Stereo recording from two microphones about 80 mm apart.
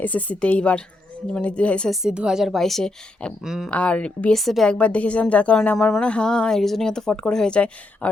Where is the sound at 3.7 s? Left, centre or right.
Centre.